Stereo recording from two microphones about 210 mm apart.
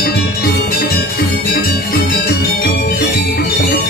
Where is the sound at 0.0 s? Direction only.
50° left (ahead or behind).